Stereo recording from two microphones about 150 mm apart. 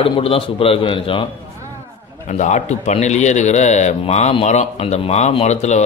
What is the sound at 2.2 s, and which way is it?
A man's voice, 50° left (ahead or behind).